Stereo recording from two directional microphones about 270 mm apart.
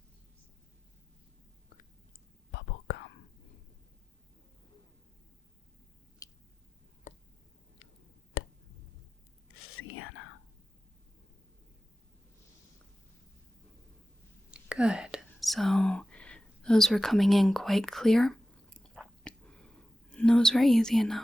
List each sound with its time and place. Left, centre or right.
2.5 s whispering: left
6.2 s chewing: centre
7.1 s a sound: left
8.4 s a sound: left
9.7 s whispering: left
14.5 s whispering: centre